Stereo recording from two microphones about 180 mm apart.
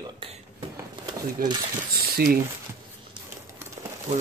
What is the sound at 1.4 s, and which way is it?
Speech, 55° right (ahead or behind).